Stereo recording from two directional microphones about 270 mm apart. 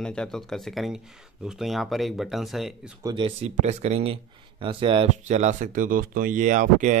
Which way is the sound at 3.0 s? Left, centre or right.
Centre.